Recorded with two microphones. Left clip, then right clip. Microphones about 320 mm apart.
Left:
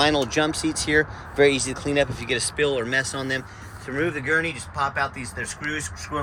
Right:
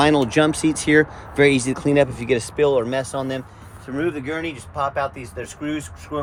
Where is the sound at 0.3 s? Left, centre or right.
Right.